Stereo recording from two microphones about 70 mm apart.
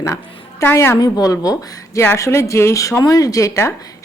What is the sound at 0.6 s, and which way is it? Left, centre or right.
Speech, left.